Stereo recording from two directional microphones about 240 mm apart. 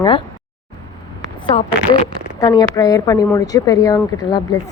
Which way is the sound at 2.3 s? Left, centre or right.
Centre.